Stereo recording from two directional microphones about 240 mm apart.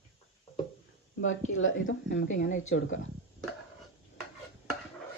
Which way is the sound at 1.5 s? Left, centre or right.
Left.